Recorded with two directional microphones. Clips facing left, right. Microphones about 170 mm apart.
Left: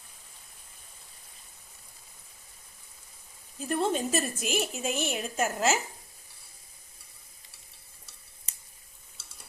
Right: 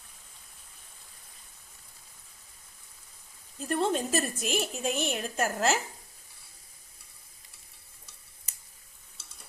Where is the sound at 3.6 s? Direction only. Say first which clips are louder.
Even; centre (ahead or behind).